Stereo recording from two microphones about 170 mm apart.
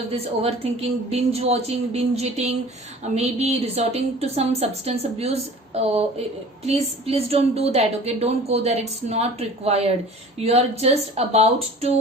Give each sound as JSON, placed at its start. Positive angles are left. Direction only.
{"t": 0.1, "sound": "a woman's voice", "side_deg": -35}